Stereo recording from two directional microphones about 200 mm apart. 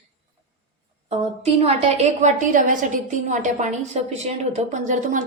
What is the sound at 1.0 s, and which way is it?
A woman's voice, 30° right (ahead or behind).